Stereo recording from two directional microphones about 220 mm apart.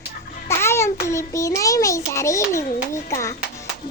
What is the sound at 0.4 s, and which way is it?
Child singing, 10° left (ahead or behind).